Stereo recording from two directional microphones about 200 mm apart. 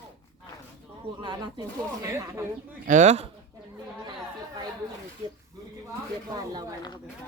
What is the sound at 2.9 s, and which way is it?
Speech, 35° right (ahead or behind).